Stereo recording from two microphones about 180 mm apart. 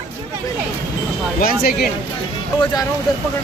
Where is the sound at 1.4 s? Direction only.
55° left (ahead or behind).